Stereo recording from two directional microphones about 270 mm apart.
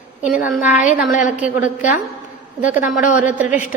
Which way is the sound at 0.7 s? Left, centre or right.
Left.